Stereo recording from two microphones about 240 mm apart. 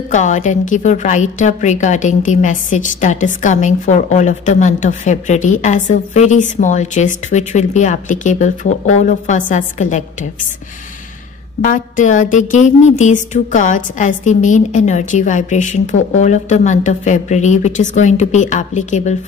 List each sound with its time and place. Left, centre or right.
0.1 s a woman's voice: left
11.6 s a woman's voice: left